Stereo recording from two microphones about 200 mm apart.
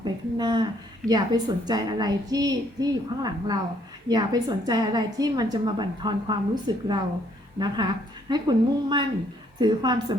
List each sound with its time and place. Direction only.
0.0 s a woman's voice: 20° right (ahead or behind)
8.3 s a woman's voice: 20° right (ahead or behind)